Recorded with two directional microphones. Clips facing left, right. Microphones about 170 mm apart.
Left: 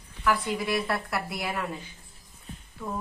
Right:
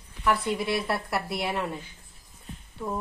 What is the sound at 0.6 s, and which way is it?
A woman's voice, 25° right (ahead or behind).